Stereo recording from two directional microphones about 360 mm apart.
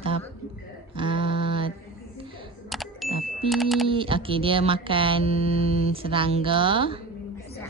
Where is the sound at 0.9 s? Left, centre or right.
Centre.